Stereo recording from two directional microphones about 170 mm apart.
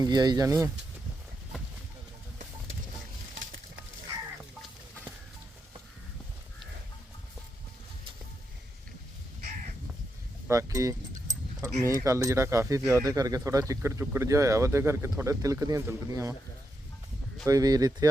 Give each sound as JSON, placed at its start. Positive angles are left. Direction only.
{"t": 0.0, "sound": "speech", "side_deg": -25}
{"t": 10.5, "sound": "speech", "side_deg": -20}
{"t": 17.4, "sound": "speech", "side_deg": -20}